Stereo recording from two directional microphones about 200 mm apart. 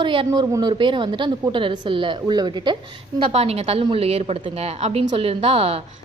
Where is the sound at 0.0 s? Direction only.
25° right (ahead or behind).